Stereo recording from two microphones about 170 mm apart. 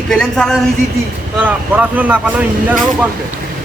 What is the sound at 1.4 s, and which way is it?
Speech, 10° right (ahead or behind).